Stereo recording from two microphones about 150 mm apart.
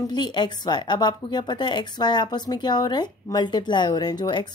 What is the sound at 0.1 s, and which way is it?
A woman's voice, 30° left (ahead or behind).